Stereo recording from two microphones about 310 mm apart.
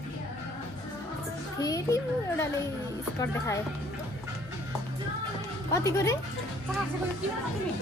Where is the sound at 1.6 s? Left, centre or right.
Centre.